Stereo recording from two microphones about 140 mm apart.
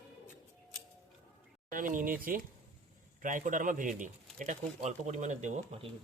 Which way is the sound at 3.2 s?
65° right (ahead or behind).